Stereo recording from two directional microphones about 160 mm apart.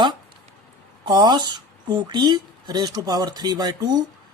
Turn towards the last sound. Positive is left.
turn(degrees=-25)  # may be behind; listen again after turning